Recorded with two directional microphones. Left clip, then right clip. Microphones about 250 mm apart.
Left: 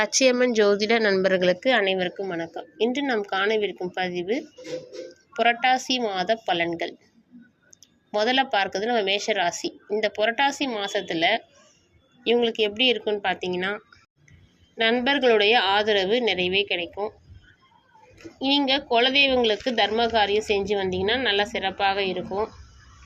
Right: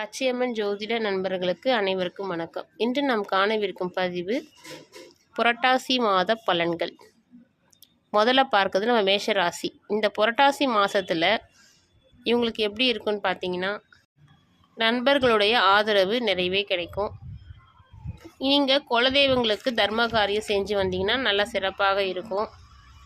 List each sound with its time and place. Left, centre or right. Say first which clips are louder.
0.0 s a woman's voice: left 6 dB; centre
5.4 s speech: left 1 dB; centre
8.2 s speech: right 2 dB; centre
18.3 s speech: right 1 dB; centre